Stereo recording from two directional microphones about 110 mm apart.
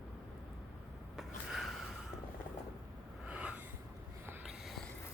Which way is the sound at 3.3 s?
10° right (ahead or behind).